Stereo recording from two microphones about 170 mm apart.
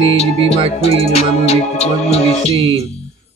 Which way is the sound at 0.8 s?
40° left (ahead or behind).